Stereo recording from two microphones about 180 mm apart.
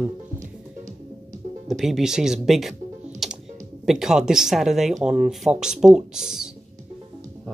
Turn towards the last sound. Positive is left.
turn(degrees=-5)  # may be behind; listen again after turning